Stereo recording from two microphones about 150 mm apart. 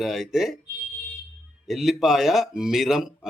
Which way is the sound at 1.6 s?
Centre (ahead or behind).